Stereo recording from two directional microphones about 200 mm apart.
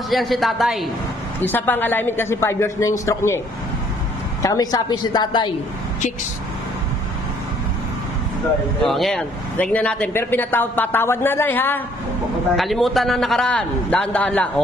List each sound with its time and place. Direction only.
0.1 s a man's voice: centre (ahead or behind)
1.5 s a man's voice: 10° left (ahead or behind)
4.4 s a woman's voice: 20° left (ahead or behind)
8.8 s a man's voice: centre (ahead or behind)